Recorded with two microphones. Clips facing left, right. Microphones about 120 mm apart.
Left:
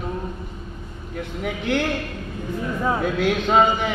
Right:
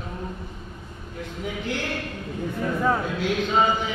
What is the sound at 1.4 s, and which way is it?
Speech, 65° left (ahead or behind).